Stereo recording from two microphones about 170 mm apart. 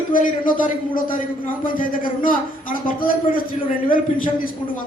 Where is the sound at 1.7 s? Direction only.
55° left (ahead or behind).